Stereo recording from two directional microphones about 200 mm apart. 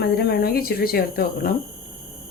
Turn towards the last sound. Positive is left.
turn(degrees=45)  # may be behind; listen again after turning